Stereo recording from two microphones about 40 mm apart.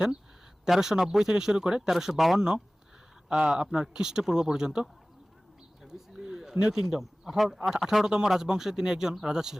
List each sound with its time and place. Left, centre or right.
0.6 s speech: centre
3.2 s speech: right
5.8 s a sound: centre
6.7 s speech: centre